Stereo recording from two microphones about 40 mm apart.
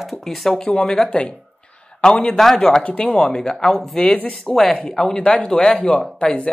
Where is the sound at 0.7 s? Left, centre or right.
Centre.